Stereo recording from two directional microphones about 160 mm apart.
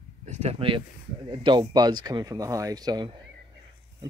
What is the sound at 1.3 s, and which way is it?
Speech, 30° right (ahead or behind).